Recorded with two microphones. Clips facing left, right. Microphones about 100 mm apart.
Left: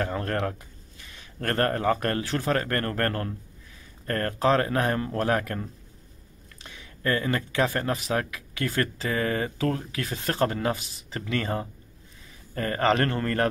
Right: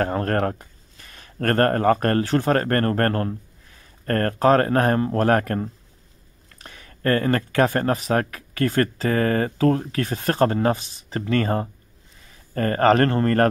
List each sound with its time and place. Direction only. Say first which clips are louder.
0.0 s speech: right 6 dB; 45° right (ahead or behind)